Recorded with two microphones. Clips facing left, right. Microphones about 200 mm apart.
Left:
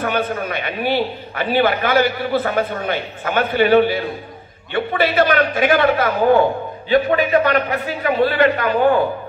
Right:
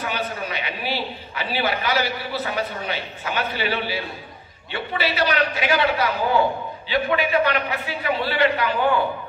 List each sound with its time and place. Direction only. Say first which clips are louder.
0.0 s a man's voice: left 7 dB; 55° left (ahead or behind)